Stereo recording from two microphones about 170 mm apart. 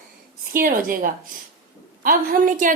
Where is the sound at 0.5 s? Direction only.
55° right (ahead or behind).